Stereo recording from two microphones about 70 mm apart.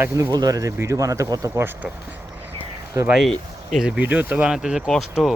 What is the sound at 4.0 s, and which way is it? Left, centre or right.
Speech, right.